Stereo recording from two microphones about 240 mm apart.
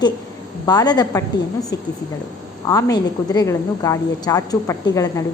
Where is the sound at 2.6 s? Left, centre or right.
Centre.